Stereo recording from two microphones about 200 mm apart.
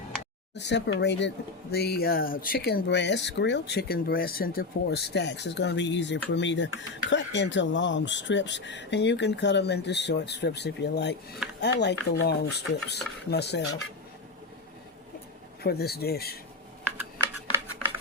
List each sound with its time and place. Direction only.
0.5 s speech: 60° left (ahead or behind)
15.6 s speech: 50° left (ahead or behind)
17.2 s a sound: 10° right (ahead or behind)